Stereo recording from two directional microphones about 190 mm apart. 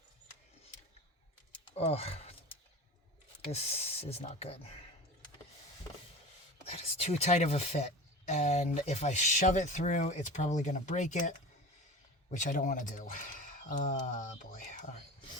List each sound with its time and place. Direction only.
1.7 s speech: 30° left (ahead or behind)
3.5 s speech: 35° left (ahead or behind)
6.7 s speech: 30° left (ahead or behind)